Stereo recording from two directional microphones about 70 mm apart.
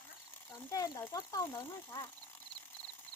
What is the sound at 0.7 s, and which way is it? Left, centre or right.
Speech, left.